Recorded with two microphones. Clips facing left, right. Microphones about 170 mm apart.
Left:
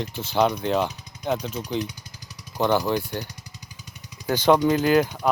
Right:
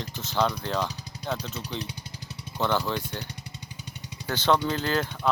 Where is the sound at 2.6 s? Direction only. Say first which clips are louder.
Left 5 dB; 15° left (ahead or behind).